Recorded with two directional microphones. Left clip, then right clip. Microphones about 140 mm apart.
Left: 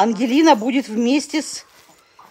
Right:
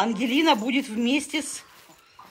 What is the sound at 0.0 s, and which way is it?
Speech, 45° left (ahead or behind).